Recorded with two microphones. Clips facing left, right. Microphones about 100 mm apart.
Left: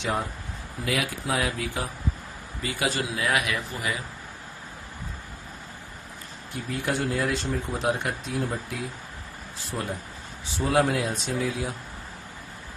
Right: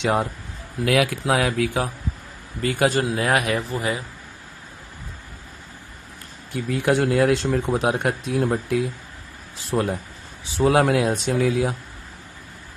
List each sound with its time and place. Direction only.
0.0 s speech: 70° right (ahead or behind)
0.9 s speech: 85° right
2.6 s speech: 50° right (ahead or behind); by 4.0 s 30° right (ahead or behind)
6.7 s speech: 85° right